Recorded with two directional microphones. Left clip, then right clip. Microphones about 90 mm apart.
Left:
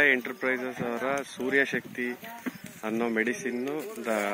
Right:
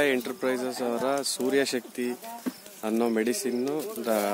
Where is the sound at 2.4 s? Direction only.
Centre (ahead or behind).